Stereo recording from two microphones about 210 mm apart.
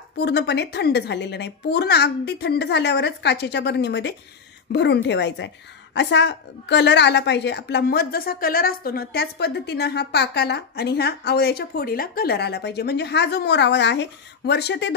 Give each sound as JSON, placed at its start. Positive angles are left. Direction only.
{"t": 0.2, "sound": "a woman's voice", "side_deg": 50}